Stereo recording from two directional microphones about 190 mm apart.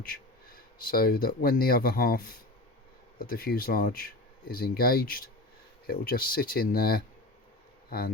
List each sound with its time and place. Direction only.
0.0 s speech: 50° left (ahead or behind)